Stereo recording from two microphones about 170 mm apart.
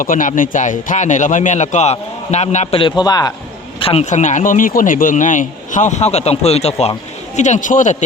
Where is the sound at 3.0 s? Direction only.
25° left (ahead or behind).